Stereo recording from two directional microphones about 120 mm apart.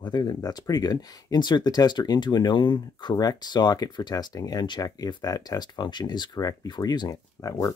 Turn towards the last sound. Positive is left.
turn(degrees=30)  # may be behind; listen again after turning